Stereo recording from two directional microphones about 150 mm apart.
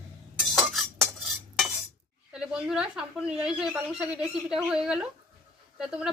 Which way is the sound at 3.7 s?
5° right (ahead or behind).